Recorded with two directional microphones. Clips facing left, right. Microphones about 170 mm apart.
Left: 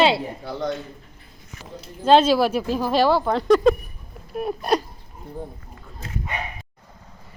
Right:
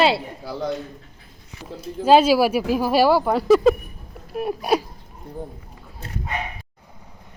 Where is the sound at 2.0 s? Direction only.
10° right (ahead or behind).